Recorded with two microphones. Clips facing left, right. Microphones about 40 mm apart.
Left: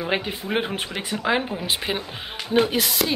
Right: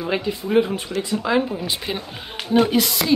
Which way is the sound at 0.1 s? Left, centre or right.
Left.